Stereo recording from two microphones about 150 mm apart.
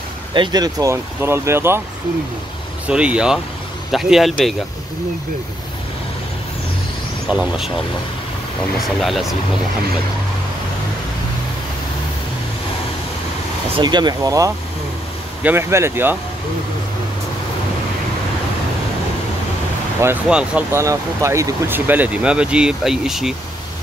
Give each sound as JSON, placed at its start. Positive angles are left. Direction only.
{"t": 0.3, "sound": "speech", "side_deg": -30}
{"t": 2.9, "sound": "speech", "side_deg": -5}
{"t": 7.2, "sound": "speech", "side_deg": -5}
{"t": 8.8, "sound": "speech", "side_deg": 0}
{"t": 13.7, "sound": "speech", "side_deg": -30}
{"t": 20.2, "sound": "speech", "side_deg": -5}
{"t": 20.7, "sound": "speech", "side_deg": -20}